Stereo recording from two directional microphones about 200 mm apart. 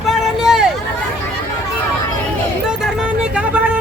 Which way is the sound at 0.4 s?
Centre (ahead or behind).